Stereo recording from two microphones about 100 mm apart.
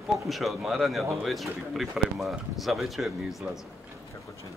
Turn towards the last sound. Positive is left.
turn(degrees=-5)  # may be behind; listen again after turning